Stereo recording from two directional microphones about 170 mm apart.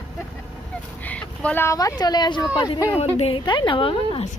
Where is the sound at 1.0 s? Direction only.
10° left (ahead or behind); by 2.4 s 25° left (ahead or behind).